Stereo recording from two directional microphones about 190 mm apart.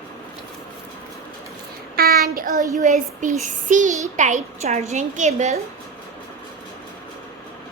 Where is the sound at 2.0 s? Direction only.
55° right (ahead or behind).